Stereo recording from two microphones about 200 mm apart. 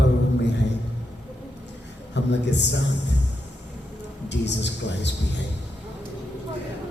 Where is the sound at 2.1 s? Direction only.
60° left (ahead or behind).